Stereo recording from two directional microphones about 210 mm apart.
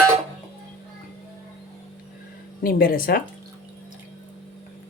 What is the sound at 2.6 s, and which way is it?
Speech, 45° left (ahead or behind).